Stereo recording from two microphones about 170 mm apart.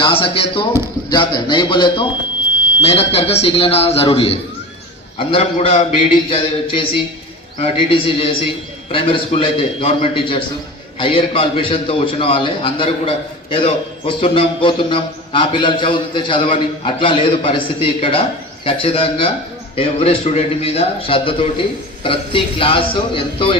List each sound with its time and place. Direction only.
0.0 s a man's voice: 30° left (ahead or behind)